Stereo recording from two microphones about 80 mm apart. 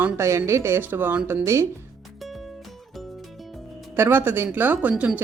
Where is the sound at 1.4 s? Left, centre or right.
Right.